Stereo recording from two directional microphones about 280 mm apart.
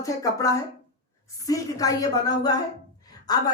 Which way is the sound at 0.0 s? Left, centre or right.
Centre.